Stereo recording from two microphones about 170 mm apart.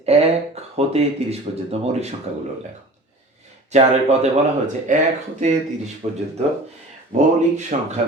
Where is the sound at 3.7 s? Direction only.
40° right (ahead or behind).